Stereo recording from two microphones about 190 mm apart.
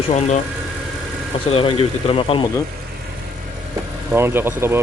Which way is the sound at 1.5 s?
30° left (ahead or behind).